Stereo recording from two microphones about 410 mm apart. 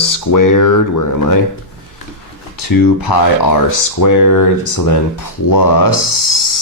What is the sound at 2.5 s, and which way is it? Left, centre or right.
Speech, left.